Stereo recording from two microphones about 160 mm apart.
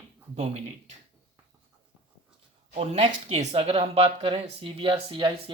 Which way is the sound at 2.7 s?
40° right (ahead or behind).